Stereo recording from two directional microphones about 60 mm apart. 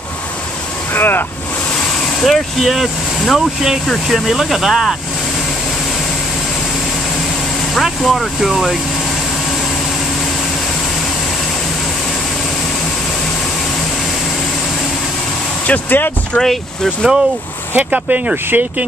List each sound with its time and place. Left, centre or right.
0.9 s speech: left
2.2 s speech: centre
7.7 s speech: centre
15.6 s speech: left
16.3 s speech: centre
17.7 s speech: right